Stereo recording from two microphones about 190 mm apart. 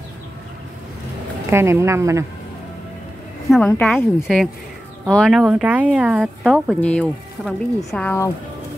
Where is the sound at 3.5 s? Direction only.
Centre (ahead or behind).